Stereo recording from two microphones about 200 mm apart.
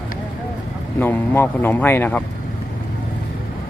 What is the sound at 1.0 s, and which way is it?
Speech, 10° left (ahead or behind).